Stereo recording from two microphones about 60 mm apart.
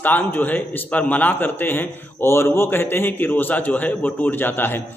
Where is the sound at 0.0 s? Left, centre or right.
Left.